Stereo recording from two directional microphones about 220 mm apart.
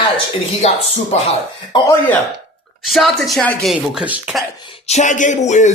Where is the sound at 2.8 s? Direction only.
Centre (ahead or behind).